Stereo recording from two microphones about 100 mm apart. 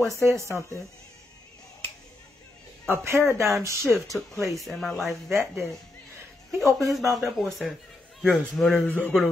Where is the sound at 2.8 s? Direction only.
25° right (ahead or behind).